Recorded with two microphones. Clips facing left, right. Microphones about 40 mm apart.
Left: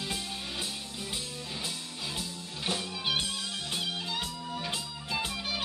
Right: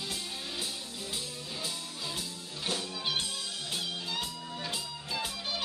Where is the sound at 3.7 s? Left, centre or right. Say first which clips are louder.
Left 2 dB; centre.